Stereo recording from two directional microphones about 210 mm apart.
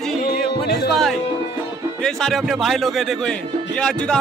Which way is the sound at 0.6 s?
50° left (ahead or behind).